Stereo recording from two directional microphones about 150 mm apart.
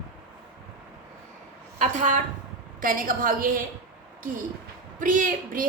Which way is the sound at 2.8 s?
65° right (ahead or behind).